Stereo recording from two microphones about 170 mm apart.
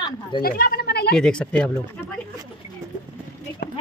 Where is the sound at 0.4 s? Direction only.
60° left (ahead or behind).